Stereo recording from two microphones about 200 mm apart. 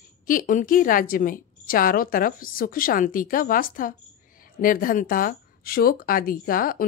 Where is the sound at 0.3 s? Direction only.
40° left (ahead or behind).